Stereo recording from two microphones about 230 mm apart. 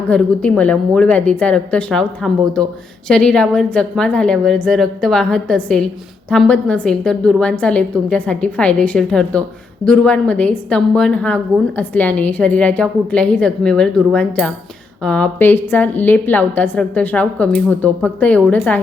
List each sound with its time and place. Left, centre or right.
0.1 s a woman's voice: centre